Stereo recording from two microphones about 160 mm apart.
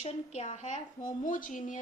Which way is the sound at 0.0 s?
45° left (ahead or behind).